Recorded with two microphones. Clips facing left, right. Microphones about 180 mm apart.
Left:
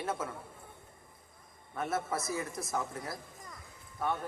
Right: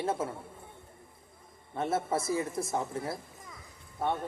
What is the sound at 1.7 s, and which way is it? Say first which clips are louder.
A man's voice: right 4 dB; 25° right (ahead or behind).